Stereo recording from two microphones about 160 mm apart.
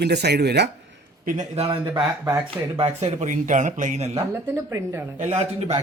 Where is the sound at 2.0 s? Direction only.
15° right (ahead or behind).